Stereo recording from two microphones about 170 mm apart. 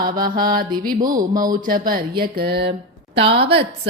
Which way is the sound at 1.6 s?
55° right (ahead or behind).